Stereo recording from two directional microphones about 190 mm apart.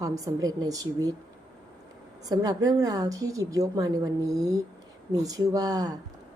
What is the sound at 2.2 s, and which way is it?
A woman's voice, 20° right (ahead or behind).